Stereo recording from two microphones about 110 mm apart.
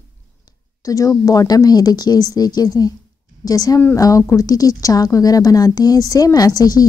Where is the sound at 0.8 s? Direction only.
30° left (ahead or behind).